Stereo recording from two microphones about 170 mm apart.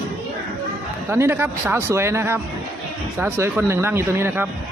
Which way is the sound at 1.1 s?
15° right (ahead or behind).